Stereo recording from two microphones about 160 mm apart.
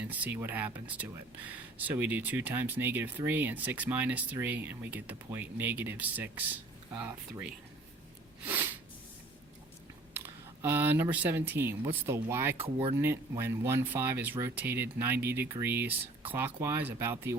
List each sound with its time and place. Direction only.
0.0 s speech: 10° right (ahead or behind)
8.4 s sneeze: 15° right (ahead or behind)
10.2 s speech: 15° right (ahead or behind)